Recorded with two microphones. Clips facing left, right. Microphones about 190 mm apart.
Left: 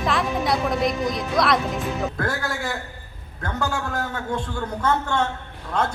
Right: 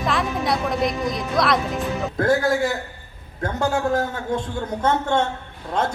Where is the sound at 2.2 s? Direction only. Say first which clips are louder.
Right 8 dB; 20° right (ahead or behind).